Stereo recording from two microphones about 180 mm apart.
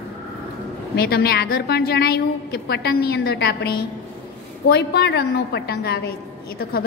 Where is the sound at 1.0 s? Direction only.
60° left (ahead or behind).